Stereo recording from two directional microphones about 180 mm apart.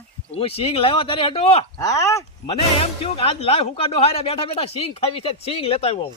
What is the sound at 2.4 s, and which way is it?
Speech, 30° left (ahead or behind).